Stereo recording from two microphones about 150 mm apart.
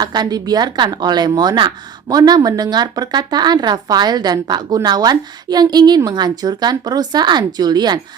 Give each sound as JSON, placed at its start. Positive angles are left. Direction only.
{"t": 0.0, "sound": "speech", "side_deg": -30}